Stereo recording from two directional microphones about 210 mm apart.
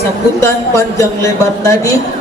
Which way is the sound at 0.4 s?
15° left (ahead or behind).